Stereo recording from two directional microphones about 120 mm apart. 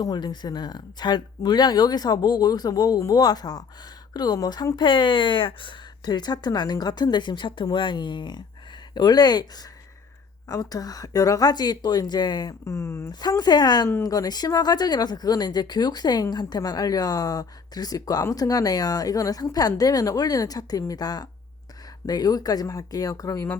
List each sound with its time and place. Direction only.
0.0 s speech: 35° left (ahead or behind)
10.5 s speech: 30° left (ahead or behind)